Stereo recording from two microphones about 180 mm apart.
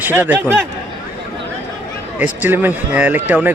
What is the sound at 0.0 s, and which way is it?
Speech, 10° right (ahead or behind).